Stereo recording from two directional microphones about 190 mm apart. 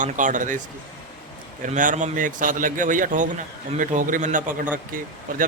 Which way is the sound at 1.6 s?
45° right (ahead or behind).